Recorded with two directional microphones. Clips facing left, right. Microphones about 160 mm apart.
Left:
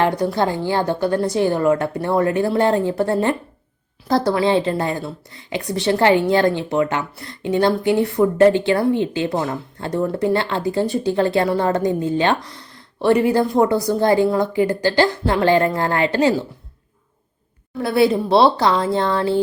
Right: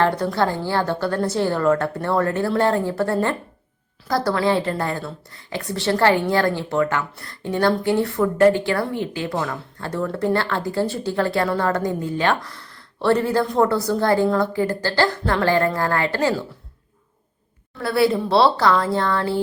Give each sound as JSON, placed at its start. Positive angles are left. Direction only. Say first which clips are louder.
{"t": 0.0, "sound": "a woman's voice", "louder": "left 1 dB", "side_deg": 15}
{"t": 17.7, "sound": "a woman's voice", "louder": "left 3 dB", "side_deg": 20}